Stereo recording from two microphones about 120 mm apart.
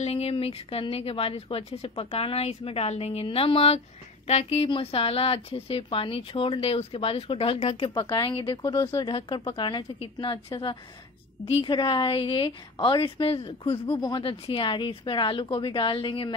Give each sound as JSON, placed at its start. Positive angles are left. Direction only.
{"t": 0.0, "sound": "a woman's voice", "side_deg": 55}
{"t": 7.9, "sound": "speech", "side_deg": 40}
{"t": 13.9, "sound": "speech", "side_deg": 40}